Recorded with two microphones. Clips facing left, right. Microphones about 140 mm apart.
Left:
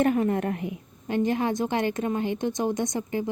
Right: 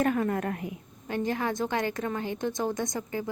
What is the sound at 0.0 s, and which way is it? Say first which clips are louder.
A woman's voice: left 4 dB; 25° left (ahead or behind).